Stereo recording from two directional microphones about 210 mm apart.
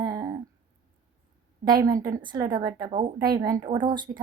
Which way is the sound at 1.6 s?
20° right (ahead or behind).